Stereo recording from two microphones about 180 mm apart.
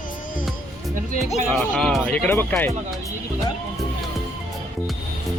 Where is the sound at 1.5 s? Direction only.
Centre (ahead or behind).